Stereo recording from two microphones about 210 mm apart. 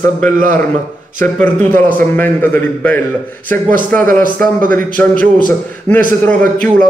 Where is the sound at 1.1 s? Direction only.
10° left (ahead or behind).